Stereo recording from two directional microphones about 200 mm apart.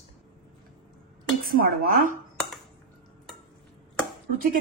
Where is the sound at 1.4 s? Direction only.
45° right (ahead or behind).